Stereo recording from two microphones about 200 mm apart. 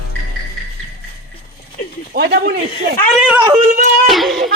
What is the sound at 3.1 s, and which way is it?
Speech, 5° right (ahead or behind).